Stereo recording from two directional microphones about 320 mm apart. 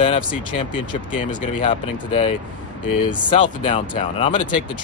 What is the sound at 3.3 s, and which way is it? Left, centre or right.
Speech, centre.